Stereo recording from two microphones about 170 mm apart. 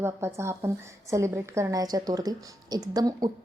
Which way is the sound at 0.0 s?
15° right (ahead or behind).